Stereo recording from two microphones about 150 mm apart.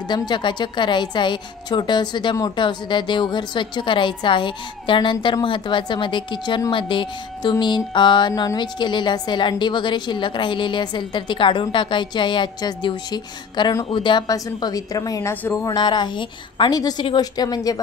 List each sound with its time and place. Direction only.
0.1 s a woman's voice: 30° left (ahead or behind)